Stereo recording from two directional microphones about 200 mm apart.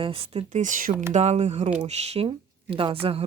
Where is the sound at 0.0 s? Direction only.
30° right (ahead or behind).